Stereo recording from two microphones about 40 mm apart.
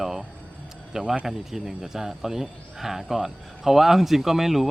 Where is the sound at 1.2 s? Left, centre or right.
Centre.